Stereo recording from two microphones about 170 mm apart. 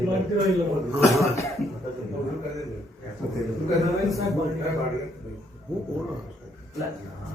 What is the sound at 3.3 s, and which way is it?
Speech, centre (ahead or behind).